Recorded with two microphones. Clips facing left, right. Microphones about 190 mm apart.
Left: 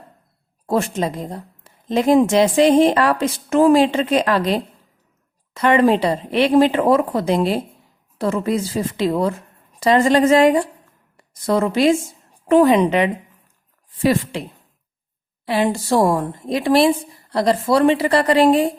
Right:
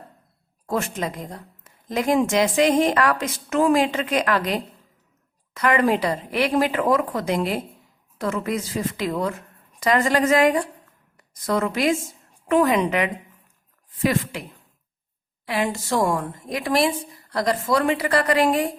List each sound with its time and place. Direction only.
0.7 s a woman's voice: 30° left (ahead or behind)
15.4 s a woman's voice: 30° left (ahead or behind)